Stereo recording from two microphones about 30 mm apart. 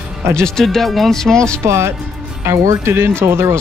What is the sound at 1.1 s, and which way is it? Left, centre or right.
Speech, centre.